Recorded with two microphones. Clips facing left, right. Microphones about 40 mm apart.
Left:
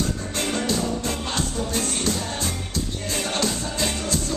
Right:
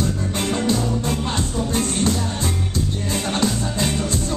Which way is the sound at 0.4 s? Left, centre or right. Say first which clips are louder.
Right 3 dB; centre.